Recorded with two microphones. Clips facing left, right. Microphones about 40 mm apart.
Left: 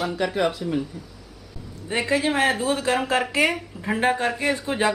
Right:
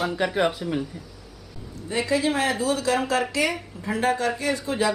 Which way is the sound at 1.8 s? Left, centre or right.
Left.